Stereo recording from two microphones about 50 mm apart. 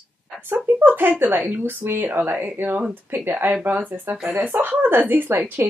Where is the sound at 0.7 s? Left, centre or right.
Right.